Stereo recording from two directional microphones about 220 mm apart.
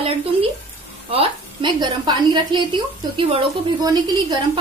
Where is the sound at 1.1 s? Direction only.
25° right (ahead or behind).